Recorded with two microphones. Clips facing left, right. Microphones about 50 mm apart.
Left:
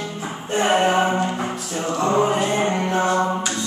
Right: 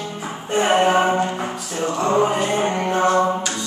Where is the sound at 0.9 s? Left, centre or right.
Centre.